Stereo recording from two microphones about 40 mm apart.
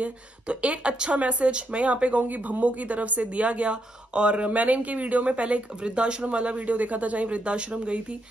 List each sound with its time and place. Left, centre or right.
0.0 s speech: right
2.2 s speech: right